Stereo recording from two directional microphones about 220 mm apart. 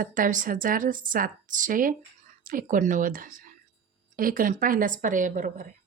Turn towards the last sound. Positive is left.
turn(degrees=-35)  # may be behind; listen again after turning